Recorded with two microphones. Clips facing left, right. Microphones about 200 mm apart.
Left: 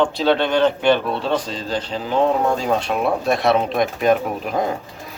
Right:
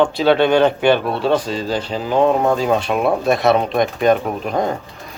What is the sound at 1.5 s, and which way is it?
Speech, 10° right (ahead or behind).